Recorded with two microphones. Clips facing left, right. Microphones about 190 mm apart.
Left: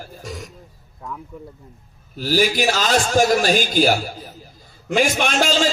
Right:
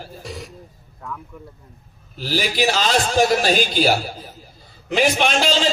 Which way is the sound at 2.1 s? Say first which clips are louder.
Left 4 dB; 45° left (ahead or behind).